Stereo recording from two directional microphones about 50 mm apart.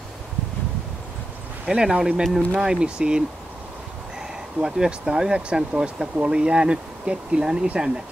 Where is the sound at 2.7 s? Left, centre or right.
Centre.